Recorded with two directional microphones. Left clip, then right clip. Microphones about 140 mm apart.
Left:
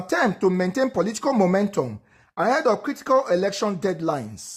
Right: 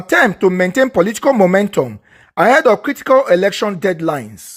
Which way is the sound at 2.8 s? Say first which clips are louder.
Right 9 dB; 15° right (ahead or behind).